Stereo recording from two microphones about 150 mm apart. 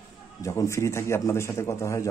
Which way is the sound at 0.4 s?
20° left (ahead or behind).